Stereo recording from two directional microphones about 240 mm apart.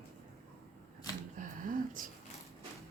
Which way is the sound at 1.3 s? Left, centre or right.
Right.